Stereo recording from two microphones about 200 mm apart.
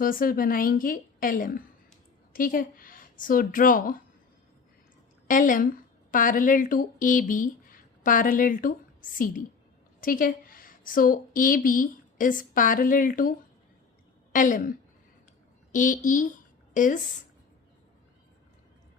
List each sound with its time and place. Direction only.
0.0 s a woman's voice: 45° left (ahead or behind)
5.3 s a woman's voice: 40° left (ahead or behind)
14.3 s a woman's voice: 40° left (ahead or behind)